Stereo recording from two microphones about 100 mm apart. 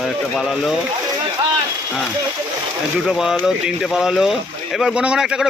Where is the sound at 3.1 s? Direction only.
5° right (ahead or behind).